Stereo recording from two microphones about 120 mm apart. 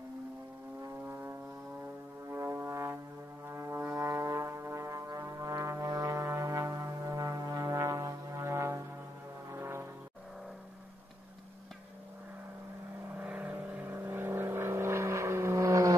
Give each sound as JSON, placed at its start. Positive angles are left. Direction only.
{"t": 1.0, "sound": "music", "side_deg": -20}
{"t": 2.2, "sound": "brass instrument", "side_deg": -20}
{"t": 9.5, "sound": "music", "side_deg": -20}
{"t": 13.1, "sound": "vehicle", "side_deg": -15}